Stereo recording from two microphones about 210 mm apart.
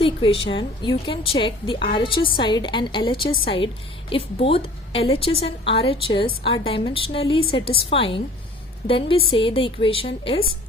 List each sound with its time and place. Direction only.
0.0 s a woman's voice: 25° left (ahead or behind)